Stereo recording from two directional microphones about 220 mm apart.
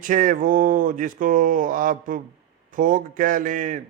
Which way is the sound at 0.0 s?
35° right (ahead or behind).